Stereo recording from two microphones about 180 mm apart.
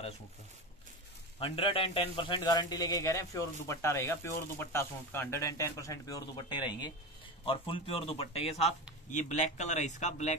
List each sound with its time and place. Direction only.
1.4 s a man's voice: 30° left (ahead or behind)